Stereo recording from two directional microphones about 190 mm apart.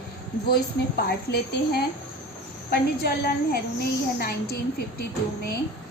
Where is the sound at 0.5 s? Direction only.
55° left (ahead or behind).